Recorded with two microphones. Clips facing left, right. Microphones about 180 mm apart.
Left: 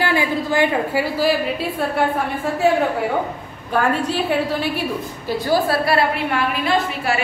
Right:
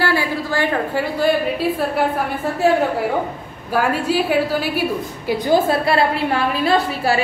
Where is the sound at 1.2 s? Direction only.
Centre (ahead or behind).